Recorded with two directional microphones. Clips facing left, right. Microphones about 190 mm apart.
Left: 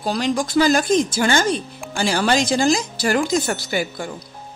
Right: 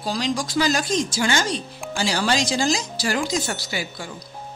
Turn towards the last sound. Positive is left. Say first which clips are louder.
# left 6 dB
turn(degrees=55)  # may be behind; listen again after turning